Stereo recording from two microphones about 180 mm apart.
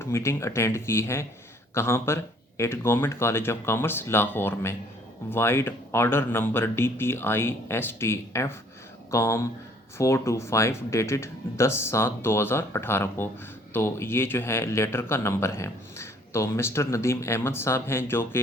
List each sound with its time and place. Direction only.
0.0 s speech: 15° left (ahead or behind)